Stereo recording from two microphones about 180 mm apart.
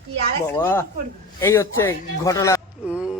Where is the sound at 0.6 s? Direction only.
15° left (ahead or behind).